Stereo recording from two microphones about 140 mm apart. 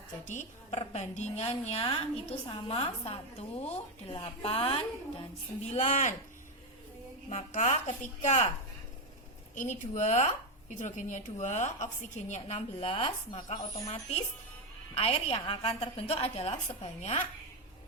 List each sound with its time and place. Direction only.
0.3 s speech: 60° left (ahead or behind)
0.8 s a woman's voice: 50° left (ahead or behind)
5.6 s a woman's voice: 55° left (ahead or behind)
7.3 s a woman's voice: 60° left (ahead or behind)
9.6 s a woman's voice: 65° left (ahead or behind)